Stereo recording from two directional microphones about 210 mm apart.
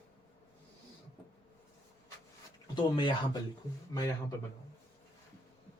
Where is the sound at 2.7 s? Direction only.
20° left (ahead or behind).